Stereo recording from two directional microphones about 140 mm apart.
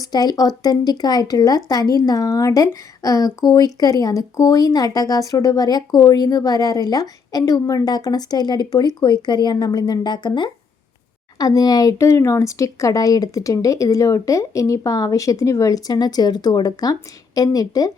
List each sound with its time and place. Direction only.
0.0 s a woman's voice: 30° left (ahead or behind)